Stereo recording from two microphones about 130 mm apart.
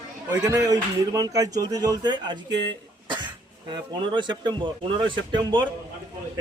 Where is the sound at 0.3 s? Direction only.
25° right (ahead or behind).